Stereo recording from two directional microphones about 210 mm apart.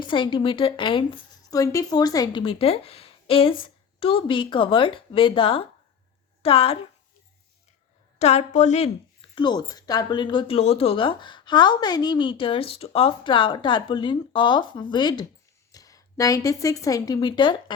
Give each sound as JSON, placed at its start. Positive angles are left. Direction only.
{"t": 0.0, "sound": "speech", "side_deg": 25}
{"t": 8.2, "sound": "a woman's voice", "side_deg": 35}
{"t": 9.3, "sound": "speech", "side_deg": 20}